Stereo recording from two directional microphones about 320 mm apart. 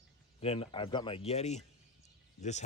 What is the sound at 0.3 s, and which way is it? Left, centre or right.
Speech, centre.